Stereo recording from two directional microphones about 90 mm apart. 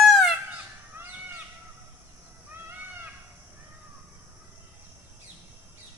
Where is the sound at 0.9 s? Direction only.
20° right (ahead or behind).